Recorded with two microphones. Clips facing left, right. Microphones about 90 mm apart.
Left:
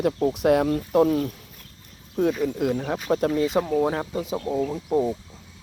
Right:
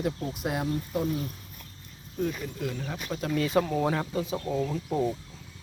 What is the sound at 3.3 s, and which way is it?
Speech, 20° left (ahead or behind).